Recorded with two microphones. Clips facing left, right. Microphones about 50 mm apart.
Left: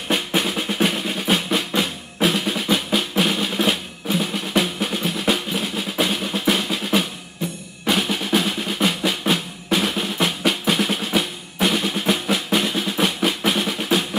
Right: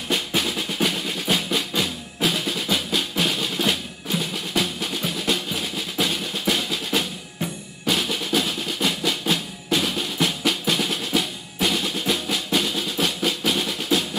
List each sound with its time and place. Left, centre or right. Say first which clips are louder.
0.1 s drum: left 3 dB; centre